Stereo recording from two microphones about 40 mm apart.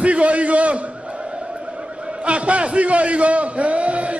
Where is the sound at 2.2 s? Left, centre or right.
Right.